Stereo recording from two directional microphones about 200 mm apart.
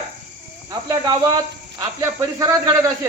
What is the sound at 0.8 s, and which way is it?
Speech, 20° right (ahead or behind).